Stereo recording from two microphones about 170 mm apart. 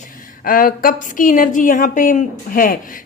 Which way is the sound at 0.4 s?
55° left (ahead or behind).